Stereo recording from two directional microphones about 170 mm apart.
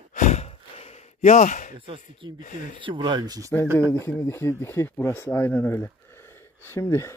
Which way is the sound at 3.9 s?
15° left (ahead or behind).